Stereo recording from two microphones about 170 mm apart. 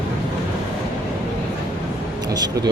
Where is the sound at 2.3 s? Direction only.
25° right (ahead or behind).